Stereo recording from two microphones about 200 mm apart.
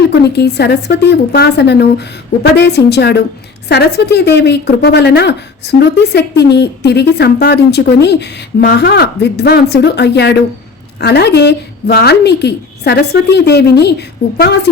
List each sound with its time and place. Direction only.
0.1 s a woman's voice: 55° left (ahead or behind)